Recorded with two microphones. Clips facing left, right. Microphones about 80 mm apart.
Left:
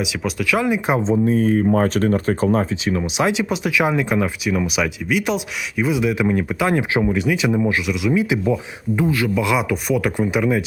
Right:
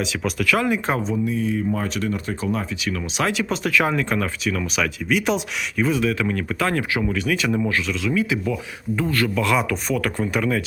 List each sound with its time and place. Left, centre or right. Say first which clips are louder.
0.0 s speech: even; centre; by 1.2 s left
1.2 s speech: left 6 dB; left
2.8 s speech: left 4 dB; left
9.0 s speech: left 3 dB; centre